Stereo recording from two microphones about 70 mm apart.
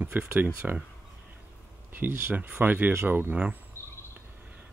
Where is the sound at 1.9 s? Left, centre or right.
Right.